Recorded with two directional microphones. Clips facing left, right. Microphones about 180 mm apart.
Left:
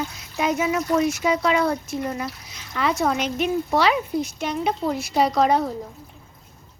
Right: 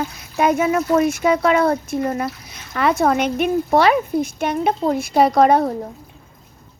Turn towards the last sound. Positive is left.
turn(degrees=-60)  # may be behind; listen again after turning